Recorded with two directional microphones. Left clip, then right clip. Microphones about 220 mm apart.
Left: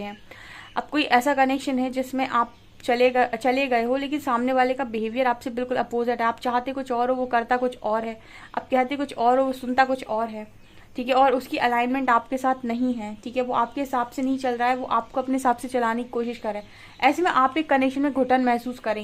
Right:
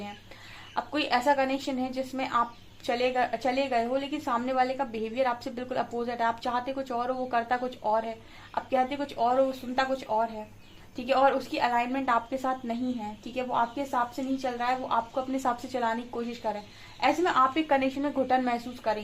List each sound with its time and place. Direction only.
0.8 s a woman's voice: 40° left (ahead or behind)